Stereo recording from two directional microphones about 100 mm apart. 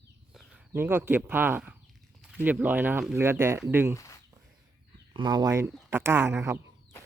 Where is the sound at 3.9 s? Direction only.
30° left (ahead or behind).